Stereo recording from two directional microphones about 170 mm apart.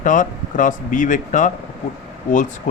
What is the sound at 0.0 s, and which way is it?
Speech, 50° left (ahead or behind).